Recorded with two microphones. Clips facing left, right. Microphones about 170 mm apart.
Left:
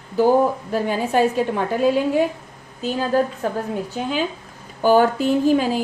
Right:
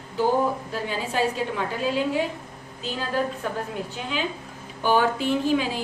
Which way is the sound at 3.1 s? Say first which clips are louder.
Left 6 dB; 45° left (ahead or behind).